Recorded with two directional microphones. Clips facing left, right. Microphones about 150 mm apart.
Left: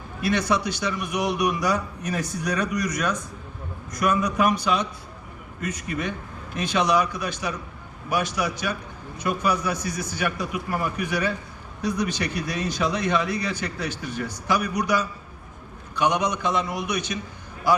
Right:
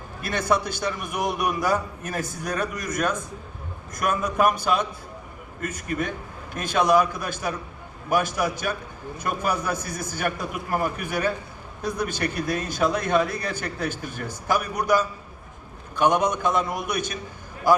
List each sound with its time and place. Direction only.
0.2 s a man's voice: 50° right (ahead or behind)